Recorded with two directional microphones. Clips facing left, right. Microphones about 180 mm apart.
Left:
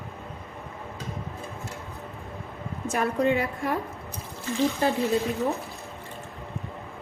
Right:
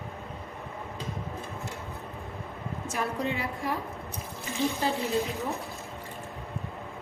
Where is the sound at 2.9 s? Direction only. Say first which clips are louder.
Left 7 dB; 55° left (ahead or behind).